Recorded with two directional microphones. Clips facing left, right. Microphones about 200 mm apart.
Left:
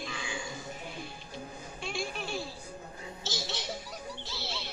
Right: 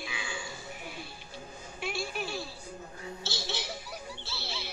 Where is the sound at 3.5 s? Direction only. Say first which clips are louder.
Even; centre (ahead or behind).